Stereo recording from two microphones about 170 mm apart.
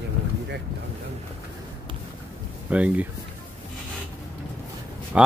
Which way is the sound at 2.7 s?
10° right (ahead or behind).